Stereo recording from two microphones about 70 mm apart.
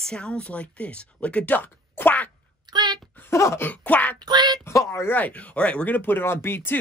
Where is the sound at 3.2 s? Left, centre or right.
Left.